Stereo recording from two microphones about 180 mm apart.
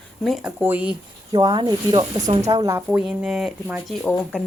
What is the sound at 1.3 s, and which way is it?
Speech, 25° right (ahead or behind).